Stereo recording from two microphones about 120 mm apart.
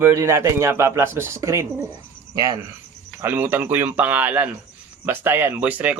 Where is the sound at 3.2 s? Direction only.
15° right (ahead or behind).